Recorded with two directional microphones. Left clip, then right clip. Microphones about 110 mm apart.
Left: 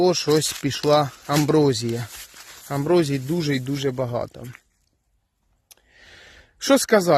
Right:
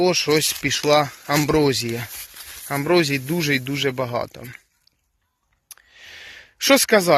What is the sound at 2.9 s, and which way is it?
Speech, 35° left (ahead or behind).